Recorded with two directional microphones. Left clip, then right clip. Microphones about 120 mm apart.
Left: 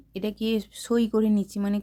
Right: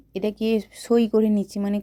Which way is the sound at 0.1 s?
20° right (ahead or behind).